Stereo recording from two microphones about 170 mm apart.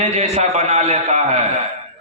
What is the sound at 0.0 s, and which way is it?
A man's voice, 40° right (ahead or behind).